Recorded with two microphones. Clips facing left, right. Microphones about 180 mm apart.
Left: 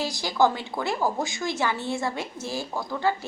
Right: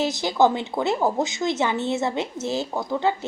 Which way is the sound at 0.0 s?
20° right (ahead or behind).